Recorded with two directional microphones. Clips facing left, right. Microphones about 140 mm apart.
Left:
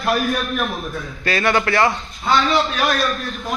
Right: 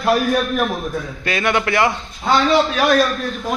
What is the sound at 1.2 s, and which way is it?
Speech, 15° right (ahead or behind).